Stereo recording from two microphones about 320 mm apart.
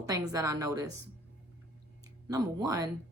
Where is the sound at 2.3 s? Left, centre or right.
Centre.